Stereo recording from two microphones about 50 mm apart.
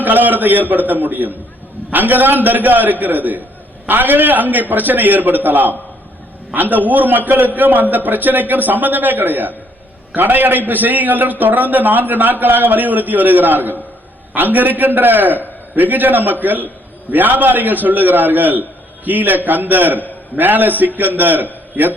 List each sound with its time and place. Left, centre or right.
0.0 s a man's voice: right